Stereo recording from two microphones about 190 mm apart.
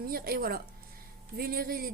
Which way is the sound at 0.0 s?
50° right (ahead or behind).